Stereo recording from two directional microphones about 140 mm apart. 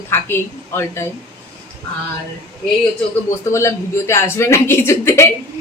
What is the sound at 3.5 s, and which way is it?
Speech, 20° left (ahead or behind).